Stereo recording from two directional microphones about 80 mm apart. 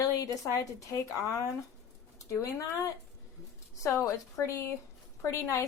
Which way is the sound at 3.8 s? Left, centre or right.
Left.